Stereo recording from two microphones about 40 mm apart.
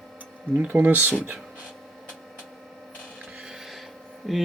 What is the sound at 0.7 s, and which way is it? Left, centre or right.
Speech, right.